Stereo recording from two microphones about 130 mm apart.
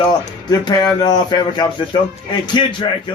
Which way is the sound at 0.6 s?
30° left (ahead or behind).